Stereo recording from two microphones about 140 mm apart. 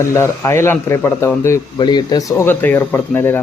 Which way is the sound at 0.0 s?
20° left (ahead or behind).